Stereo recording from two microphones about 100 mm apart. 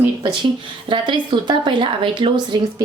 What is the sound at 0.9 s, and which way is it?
A woman's voice, 55° right (ahead or behind).